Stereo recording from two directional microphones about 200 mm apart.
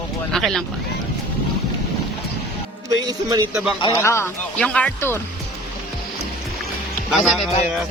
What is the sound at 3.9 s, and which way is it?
Speech, 15° left (ahead or behind).